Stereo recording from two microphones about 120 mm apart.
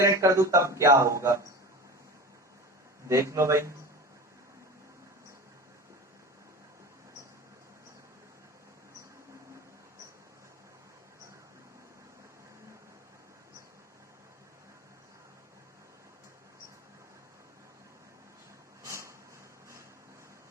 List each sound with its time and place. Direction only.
0.0 s speech: 25° right (ahead or behind)
3.1 s speech: 25° right (ahead or behind)
18.8 s a sound: 25° right (ahead or behind)